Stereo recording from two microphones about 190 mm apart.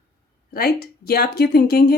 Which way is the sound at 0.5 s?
55° left (ahead or behind).